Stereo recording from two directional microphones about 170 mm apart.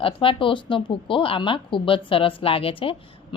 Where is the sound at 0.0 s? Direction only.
30° left (ahead or behind).